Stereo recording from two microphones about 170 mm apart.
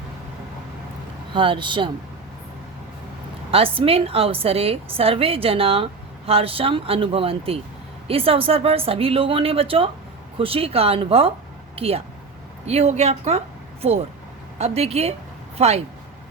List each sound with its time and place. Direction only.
1.3 s speech: 30° right (ahead or behind)
3.5 s a woman's voice: 35° right (ahead or behind)